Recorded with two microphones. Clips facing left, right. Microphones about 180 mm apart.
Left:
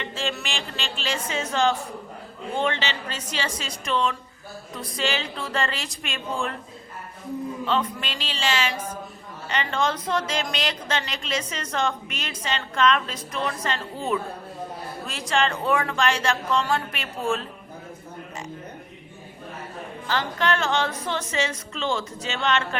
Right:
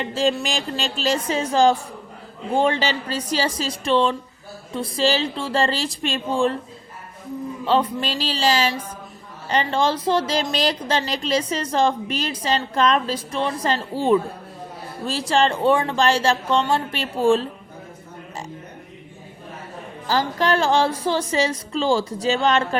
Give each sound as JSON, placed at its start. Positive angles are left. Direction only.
{"t": 0.0, "sound": "a woman's voice", "side_deg": -40}
{"t": 7.6, "sound": "a woman's voice", "side_deg": -35}
{"t": 20.1, "sound": "a woman's voice", "side_deg": -35}